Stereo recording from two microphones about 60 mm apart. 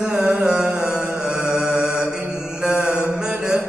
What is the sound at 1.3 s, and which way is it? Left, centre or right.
Mantra, centre.